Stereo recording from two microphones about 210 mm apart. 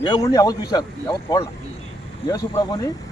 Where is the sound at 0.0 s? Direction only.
20° left (ahead or behind).